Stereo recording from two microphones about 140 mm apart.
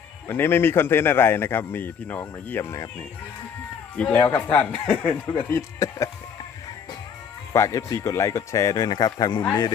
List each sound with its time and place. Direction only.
0.3 s a man's voice: 15° left (ahead or behind)
3.9 s a man's voice: 10° left (ahead or behind)
7.5 s speech: 20° left (ahead or behind)